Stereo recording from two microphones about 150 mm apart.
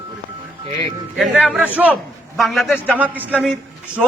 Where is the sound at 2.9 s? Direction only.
10° right (ahead or behind).